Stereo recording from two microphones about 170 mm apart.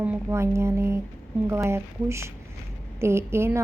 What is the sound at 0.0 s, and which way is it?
A woman's voice, 10° right (ahead or behind).